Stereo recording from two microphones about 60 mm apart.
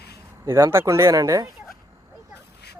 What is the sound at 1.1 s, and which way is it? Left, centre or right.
Speech, right.